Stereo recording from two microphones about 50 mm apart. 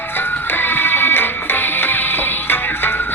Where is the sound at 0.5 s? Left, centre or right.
Left.